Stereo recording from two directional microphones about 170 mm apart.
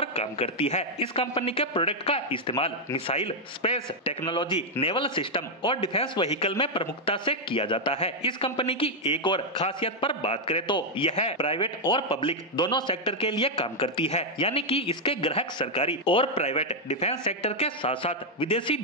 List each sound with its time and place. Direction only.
0.0 s a man's voice: 35° left (ahead or behind)